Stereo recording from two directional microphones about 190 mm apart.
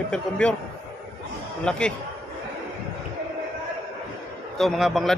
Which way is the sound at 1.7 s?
5° left (ahead or behind).